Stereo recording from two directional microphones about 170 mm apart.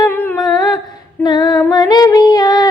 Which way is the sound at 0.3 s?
25° left (ahead or behind).